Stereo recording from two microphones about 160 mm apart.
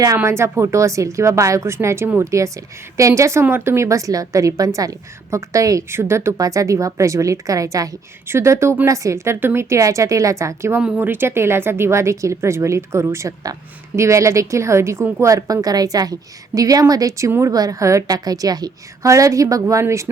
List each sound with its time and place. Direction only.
0.0 s a woman's voice: 20° right (ahead or behind)